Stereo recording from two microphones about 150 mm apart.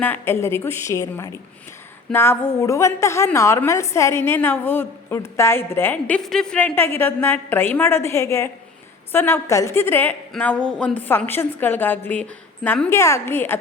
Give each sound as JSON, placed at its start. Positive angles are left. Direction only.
{"t": 0.0, "sound": "a woman's voice", "side_deg": 15}